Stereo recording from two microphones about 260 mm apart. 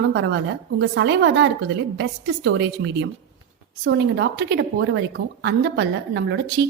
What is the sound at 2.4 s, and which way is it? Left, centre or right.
A woman's voice, right.